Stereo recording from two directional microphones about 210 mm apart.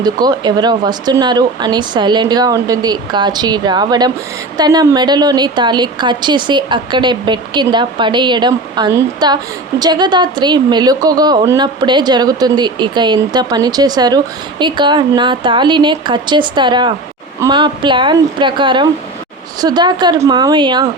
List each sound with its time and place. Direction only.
0.0 s a woman's voice: 20° right (ahead or behind)